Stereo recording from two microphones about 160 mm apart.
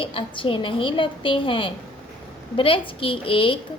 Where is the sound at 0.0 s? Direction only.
35° left (ahead or behind).